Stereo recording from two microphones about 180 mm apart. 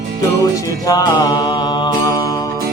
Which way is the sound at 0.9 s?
20° left (ahead or behind).